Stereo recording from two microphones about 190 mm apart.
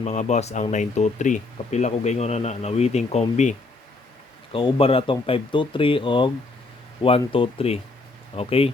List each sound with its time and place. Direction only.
0.0 s speech: 35° left (ahead or behind)
4.5 s speech: 30° left (ahead or behind)